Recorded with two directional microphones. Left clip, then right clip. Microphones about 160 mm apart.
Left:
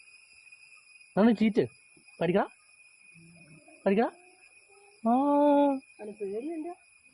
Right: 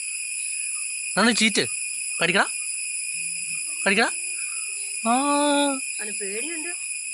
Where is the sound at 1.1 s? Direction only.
10° left (ahead or behind).